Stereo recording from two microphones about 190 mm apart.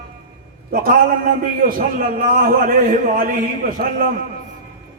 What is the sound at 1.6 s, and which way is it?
A man's voice, 45° right (ahead or behind).